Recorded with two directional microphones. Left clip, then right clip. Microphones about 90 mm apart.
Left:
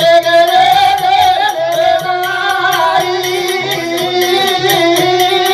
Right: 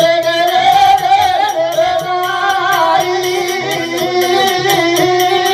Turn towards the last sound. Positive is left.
turn(degrees=30)  # may be behind; listen again after turning